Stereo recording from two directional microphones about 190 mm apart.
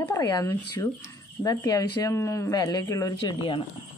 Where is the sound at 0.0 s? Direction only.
15° left (ahead or behind).